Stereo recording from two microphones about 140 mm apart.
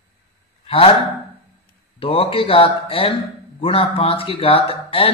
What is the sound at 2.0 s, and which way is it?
Speech, 40° left (ahead or behind).